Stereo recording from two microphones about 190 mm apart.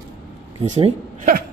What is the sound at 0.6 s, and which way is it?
Speech, 35° right (ahead or behind).